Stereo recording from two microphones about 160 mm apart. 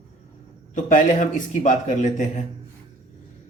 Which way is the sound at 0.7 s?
55° left (ahead or behind).